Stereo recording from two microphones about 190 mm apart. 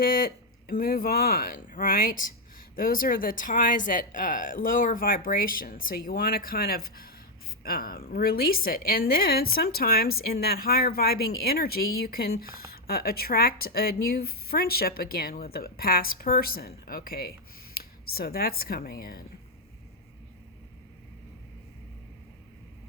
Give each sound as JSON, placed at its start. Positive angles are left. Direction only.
{"t": 0.0, "sound": "a woman's voice", "side_deg": 50}